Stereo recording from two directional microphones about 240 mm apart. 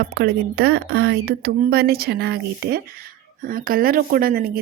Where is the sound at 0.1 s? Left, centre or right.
Right.